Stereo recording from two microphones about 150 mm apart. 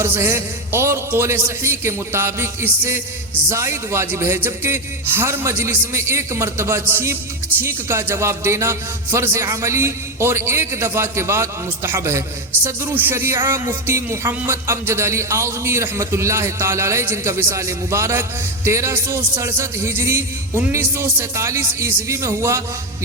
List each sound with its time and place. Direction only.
0.0 s a man's voice: 15° right (ahead or behind)